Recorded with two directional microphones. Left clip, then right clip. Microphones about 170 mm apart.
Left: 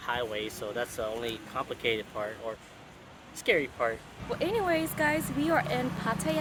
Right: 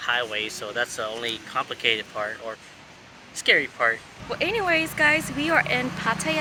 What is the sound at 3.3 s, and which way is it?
Speech, 20° left (ahead or behind).